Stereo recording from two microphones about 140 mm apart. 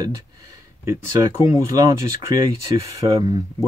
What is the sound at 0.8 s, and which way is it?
Speech, 20° right (ahead or behind).